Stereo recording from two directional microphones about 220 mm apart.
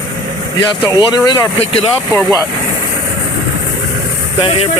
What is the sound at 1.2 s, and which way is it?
Speech, 20° left (ahead or behind).